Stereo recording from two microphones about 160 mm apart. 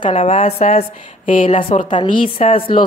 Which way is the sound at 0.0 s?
40° left (ahead or behind).